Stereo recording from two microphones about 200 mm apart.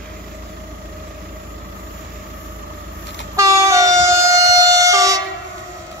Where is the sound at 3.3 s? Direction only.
15° right (ahead or behind).